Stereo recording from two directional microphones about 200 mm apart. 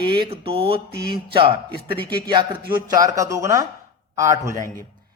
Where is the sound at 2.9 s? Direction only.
15° right (ahead or behind).